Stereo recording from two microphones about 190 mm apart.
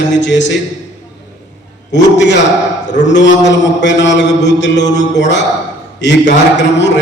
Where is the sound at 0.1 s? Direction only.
70° left (ahead or behind).